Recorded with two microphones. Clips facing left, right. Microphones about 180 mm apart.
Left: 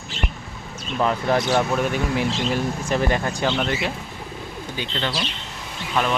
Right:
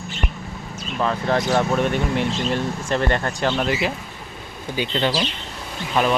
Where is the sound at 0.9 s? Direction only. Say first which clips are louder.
Left 1 dB; 10° left (ahead or behind).